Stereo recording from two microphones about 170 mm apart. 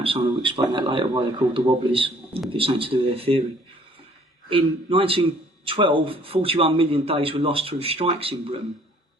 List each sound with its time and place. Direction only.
0.0 s a man's voice: 30° right (ahead or behind)
4.4 s a man's voice: 30° right (ahead or behind)